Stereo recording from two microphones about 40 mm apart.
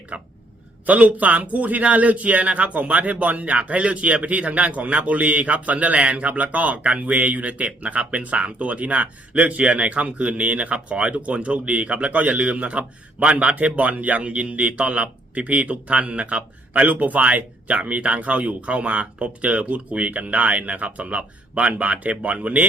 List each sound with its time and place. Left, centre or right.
0.1 s a man's voice: right